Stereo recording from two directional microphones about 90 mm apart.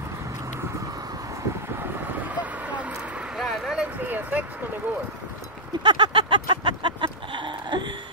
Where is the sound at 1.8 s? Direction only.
15° right (ahead or behind); by 3.8 s centre (ahead or behind).